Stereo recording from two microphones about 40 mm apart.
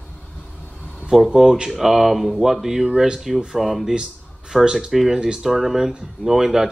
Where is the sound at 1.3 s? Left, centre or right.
Centre.